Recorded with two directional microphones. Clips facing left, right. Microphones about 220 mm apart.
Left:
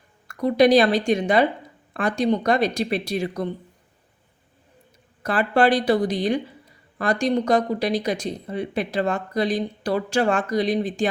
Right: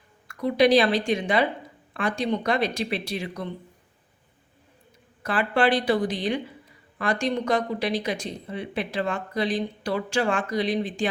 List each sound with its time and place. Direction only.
0.3 s speech: 45° left (ahead or behind)
5.2 s speech: 40° left (ahead or behind)